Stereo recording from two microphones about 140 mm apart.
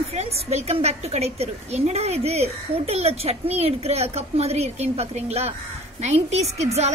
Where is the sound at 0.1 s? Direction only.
50° right (ahead or behind).